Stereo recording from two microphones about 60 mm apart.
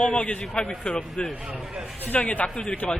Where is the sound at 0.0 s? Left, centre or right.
Centre.